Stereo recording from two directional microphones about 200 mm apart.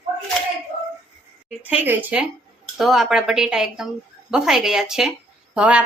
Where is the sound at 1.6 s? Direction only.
10° right (ahead or behind).